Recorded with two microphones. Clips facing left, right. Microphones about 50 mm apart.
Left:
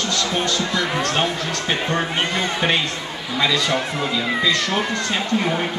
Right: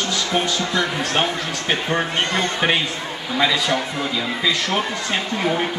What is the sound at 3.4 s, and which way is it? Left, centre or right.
A man's voice, centre.